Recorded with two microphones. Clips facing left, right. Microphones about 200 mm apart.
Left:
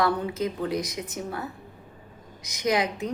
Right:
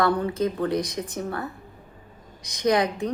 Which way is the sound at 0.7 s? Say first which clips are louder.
Right 3 dB; 30° right (ahead or behind).